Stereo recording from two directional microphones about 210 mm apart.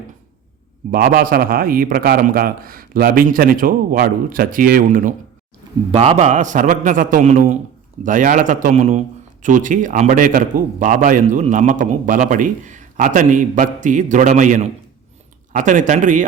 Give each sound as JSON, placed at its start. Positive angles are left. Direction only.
{"t": 0.9, "sound": "a man's voice", "side_deg": -45}
{"t": 5.9, "sound": "a man's voice", "side_deg": -30}